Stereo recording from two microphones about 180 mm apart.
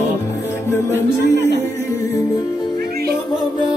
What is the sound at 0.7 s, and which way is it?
Music, 15° left (ahead or behind).